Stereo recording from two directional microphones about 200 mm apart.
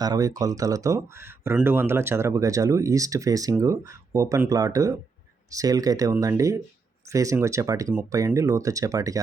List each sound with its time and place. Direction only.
0.0 s speech: 20° right (ahead or behind)